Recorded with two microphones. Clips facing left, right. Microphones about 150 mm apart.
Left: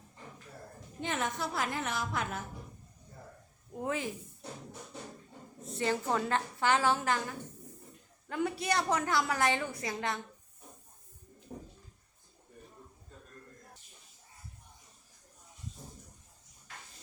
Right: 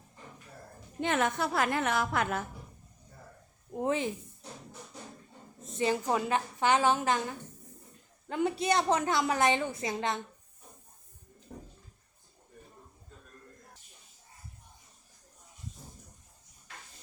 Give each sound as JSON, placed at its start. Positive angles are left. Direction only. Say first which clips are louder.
{"t": 1.0, "sound": "a woman's voice", "louder": "right 5 dB", "side_deg": -65}
{"t": 3.7, "sound": "speech", "louder": "right 5 dB", "side_deg": -25}
{"t": 5.6, "sound": "a woman's voice", "louder": "right 3 dB", "side_deg": -20}